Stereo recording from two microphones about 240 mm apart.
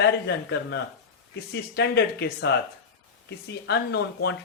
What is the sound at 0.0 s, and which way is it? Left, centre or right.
Speech, left.